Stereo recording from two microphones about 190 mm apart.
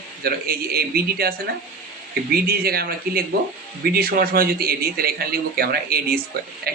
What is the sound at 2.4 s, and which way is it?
Speech, 55° right (ahead or behind).